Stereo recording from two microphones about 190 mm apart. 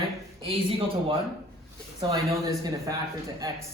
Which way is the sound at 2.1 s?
20° right (ahead or behind).